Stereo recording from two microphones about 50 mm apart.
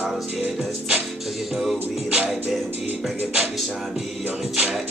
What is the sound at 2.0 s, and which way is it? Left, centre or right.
Music, right.